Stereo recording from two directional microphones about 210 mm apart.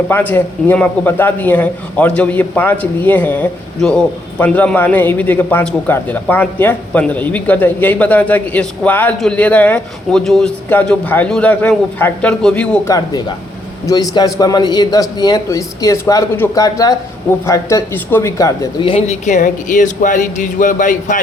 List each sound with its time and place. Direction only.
0.1 s a man's voice: 10° left (ahead or behind); by 21.2 s 40° left (ahead or behind)